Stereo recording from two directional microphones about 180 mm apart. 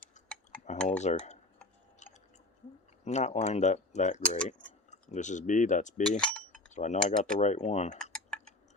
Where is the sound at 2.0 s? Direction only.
40° left (ahead or behind).